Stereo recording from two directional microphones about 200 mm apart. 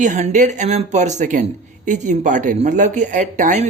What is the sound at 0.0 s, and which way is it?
Speech, 40° right (ahead or behind).